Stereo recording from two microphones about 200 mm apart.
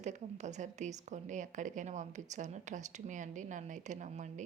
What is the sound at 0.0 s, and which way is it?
Speech, 35° right (ahead or behind).